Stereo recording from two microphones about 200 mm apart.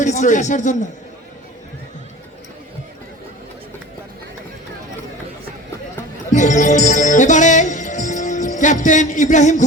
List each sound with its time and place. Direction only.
0.0 s a man's voice: 40° left (ahead or behind)
6.3 s music: 40° left (ahead or behind)